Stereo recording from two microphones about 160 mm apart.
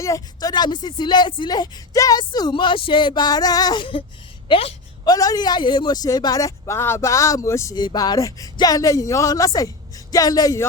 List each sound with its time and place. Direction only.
0.0 s speech: 20° left (ahead or behind)
4.4 s a sound: 30° left (ahead or behind)
5.1 s speech: 25° left (ahead or behind)